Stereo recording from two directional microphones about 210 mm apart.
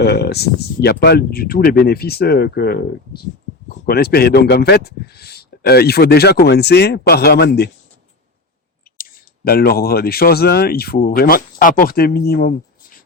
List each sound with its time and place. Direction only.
0.0 s speech: 50° left (ahead or behind)
3.8 s speech: 50° left (ahead or behind)
9.0 s speech: 45° left (ahead or behind)